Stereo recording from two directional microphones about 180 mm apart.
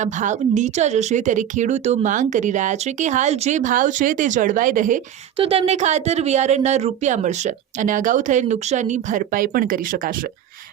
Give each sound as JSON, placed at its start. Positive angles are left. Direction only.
{"t": 0.0, "sound": "speech", "side_deg": -45}
{"t": 5.4, "sound": "speech", "side_deg": -35}